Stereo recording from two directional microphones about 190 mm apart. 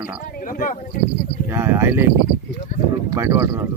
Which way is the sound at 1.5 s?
15° right (ahead or behind).